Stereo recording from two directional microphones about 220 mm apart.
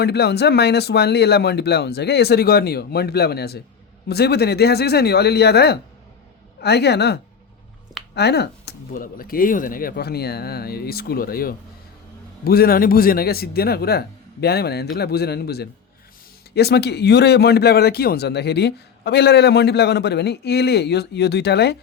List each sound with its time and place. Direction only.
0.0 s speech: 50° left (ahead or behind)